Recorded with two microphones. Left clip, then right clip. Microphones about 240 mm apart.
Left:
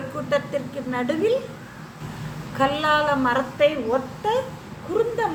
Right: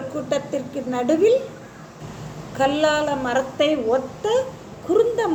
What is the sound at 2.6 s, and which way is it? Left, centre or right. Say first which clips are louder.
A woman's voice: right 1 dB; centre.